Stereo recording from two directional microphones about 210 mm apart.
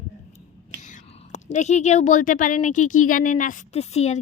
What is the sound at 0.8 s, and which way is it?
Speech, 35° left (ahead or behind).